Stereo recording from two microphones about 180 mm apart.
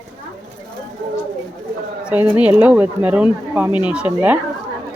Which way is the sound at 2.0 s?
10° right (ahead or behind).